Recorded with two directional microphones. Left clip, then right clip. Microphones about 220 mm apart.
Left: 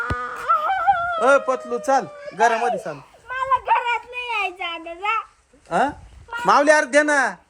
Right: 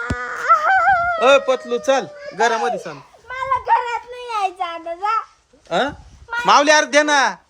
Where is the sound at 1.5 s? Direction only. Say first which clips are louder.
Right 4 dB; 20° right (ahead or behind).